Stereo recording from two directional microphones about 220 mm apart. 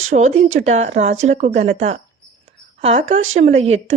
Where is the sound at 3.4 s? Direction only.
30° right (ahead or behind).